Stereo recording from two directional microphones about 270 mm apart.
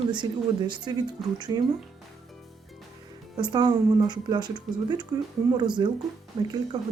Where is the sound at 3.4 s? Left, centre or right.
Centre.